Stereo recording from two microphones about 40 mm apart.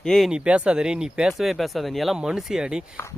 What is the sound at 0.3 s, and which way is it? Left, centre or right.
Speech, right.